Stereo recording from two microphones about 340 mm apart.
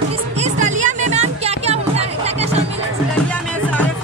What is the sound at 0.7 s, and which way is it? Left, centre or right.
Music, right.